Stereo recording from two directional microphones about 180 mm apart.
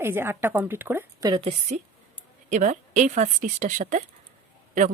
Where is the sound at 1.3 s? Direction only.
35° right (ahead or behind).